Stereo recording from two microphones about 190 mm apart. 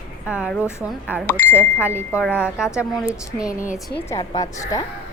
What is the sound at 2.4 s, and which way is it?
A woman's voice, 5° right (ahead or behind).